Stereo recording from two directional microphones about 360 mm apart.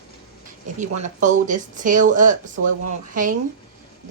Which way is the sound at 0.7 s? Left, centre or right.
Right.